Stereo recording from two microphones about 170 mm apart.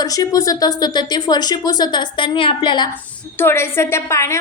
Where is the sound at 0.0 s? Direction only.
20° left (ahead or behind).